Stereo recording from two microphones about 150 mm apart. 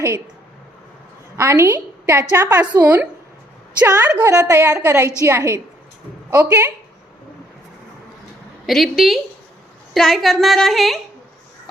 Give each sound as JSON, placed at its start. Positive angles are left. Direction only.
{"t": 1.4, "sound": "a woman's voice", "side_deg": -20}
{"t": 8.6, "sound": "a woman's voice", "side_deg": 0}